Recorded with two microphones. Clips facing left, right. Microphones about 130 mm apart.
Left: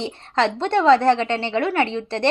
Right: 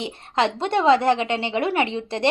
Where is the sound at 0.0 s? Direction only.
15° right (ahead or behind).